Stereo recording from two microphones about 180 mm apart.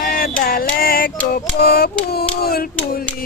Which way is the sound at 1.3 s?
60° left (ahead or behind).